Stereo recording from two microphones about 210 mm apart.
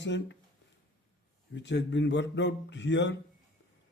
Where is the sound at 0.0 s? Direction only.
60° left (ahead or behind).